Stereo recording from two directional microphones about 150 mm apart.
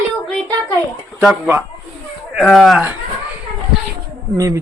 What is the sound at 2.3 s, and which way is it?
Speech, centre (ahead or behind).